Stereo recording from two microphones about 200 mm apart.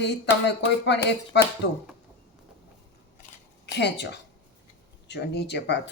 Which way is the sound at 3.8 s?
60° left (ahead or behind).